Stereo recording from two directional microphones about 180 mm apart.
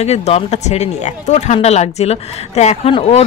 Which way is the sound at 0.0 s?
35° left (ahead or behind).